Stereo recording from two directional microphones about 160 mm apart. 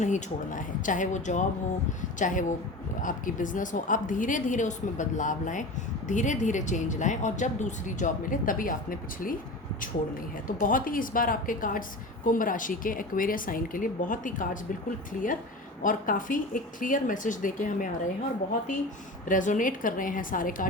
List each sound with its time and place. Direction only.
0.0 s speech: 50° left (ahead or behind)
10.4 s speech: 60° left (ahead or behind)
19.3 s speech: 55° left (ahead or behind)